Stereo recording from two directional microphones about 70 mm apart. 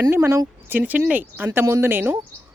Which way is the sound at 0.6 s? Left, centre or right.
Right.